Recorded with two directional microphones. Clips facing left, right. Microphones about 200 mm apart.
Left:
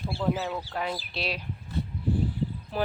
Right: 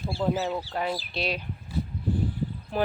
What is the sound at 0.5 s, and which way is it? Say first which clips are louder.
Speech: right 2 dB; 5° right (ahead or behind).